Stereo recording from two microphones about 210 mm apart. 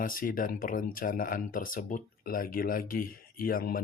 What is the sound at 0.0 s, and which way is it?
Speech, 40° left (ahead or behind).